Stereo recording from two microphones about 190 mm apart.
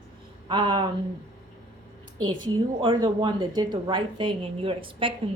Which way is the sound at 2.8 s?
25° right (ahead or behind).